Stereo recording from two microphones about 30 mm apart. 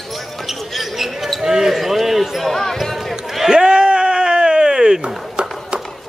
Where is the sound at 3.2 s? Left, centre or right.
Centre.